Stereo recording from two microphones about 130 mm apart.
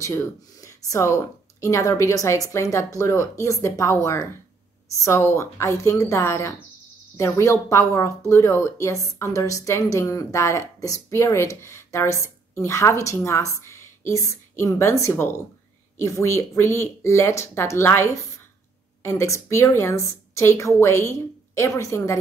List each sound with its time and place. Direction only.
0.0 s a woman's voice: 25° left (ahead or behind)